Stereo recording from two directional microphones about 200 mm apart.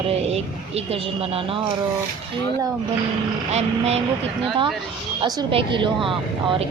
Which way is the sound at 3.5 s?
35° right (ahead or behind).